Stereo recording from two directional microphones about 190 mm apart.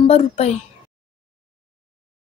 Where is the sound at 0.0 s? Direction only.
35° left (ahead or behind).